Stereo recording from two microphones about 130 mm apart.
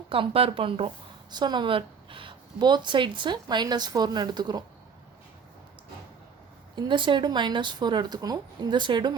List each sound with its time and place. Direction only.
0.1 s speech: 45° right (ahead or behind)
1.3 s speech: 35° right (ahead or behind)
6.7 s speech: 40° right (ahead or behind)